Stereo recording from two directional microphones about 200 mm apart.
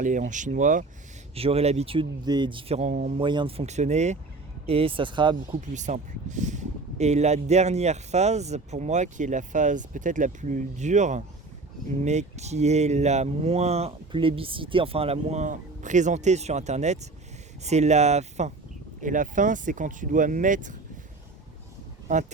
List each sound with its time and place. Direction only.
0.0 s speech: 40° right (ahead or behind)
1.4 s speech: 30° right (ahead or behind)
3.2 s speech: 25° right (ahead or behind)
5.5 s speech: 35° right (ahead or behind)
22.1 s speech: 40° right (ahead or behind)